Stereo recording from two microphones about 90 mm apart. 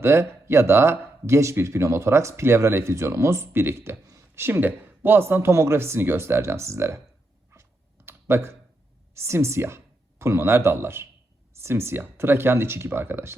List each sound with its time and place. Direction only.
0.0 s speech: 30° right (ahead or behind)
7.5 s computer keyboard: 30° right (ahead or behind)
9.1 s speech: 30° right (ahead or behind)